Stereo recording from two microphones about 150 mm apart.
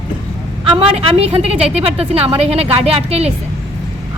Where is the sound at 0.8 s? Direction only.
40° right (ahead or behind).